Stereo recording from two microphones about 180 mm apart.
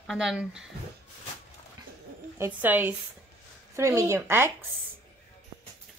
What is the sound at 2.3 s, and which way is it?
Speech, 10° right (ahead or behind).